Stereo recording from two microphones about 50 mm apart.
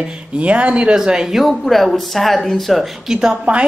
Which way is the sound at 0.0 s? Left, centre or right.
Right.